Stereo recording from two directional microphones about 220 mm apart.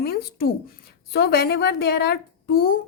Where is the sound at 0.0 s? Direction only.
45° left (ahead or behind).